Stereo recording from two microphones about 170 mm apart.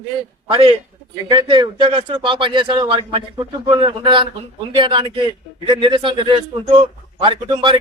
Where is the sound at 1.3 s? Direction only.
25° right (ahead or behind).